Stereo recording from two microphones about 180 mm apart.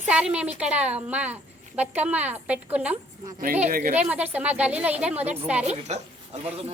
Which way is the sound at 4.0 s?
10° right (ahead or behind).